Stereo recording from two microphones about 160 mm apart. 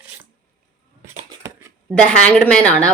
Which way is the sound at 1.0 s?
20° right (ahead or behind).